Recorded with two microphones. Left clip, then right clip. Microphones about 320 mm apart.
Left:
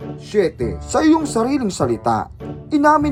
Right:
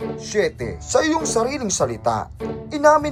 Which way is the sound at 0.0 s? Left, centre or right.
Centre.